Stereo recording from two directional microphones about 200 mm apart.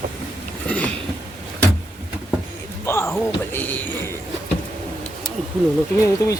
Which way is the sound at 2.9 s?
15° left (ahead or behind).